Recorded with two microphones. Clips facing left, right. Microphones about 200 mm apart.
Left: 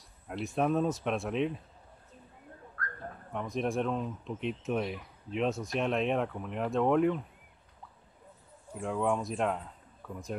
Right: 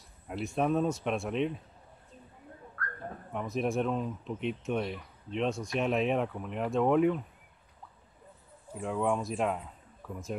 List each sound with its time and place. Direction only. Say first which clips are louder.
0.3 s speech: even; centre (ahead or behind)
3.3 s speech: right 1 dB; 5° right (ahead or behind)
8.7 s speech: even; centre (ahead or behind)